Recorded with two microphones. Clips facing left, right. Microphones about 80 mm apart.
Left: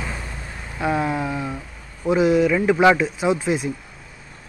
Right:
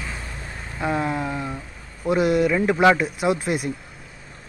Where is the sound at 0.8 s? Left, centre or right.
Centre.